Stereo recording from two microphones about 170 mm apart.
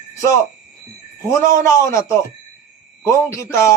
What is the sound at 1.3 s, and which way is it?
A man's voice, 15° left (ahead or behind).